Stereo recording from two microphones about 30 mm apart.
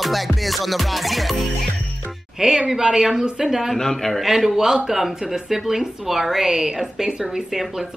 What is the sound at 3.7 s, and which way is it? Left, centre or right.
Speech, centre.